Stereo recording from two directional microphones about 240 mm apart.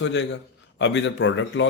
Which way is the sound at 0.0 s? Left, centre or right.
Left.